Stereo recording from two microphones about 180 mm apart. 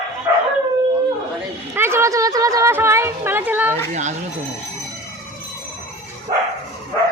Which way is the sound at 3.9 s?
40° right (ahead or behind).